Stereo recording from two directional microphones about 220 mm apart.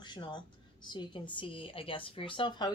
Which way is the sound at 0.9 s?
20° left (ahead or behind).